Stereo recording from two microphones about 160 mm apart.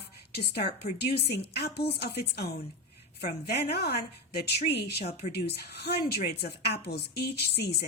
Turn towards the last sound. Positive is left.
turn(degrees=90)